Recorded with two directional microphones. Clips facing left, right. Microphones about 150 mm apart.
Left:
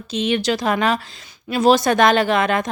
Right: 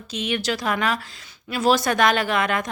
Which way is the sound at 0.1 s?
25° left (ahead or behind).